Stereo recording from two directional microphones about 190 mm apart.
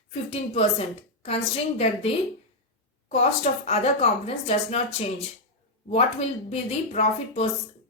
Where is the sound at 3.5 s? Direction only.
35° left (ahead or behind).